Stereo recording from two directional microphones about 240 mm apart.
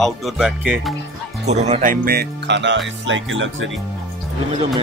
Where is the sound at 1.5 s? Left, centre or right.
Right.